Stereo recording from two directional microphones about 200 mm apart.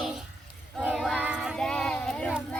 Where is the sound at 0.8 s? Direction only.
Centre (ahead or behind).